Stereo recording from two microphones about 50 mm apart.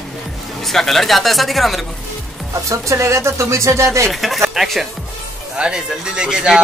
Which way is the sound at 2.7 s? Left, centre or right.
Right.